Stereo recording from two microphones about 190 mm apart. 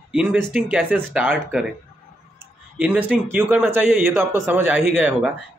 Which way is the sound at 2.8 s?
5° right (ahead or behind).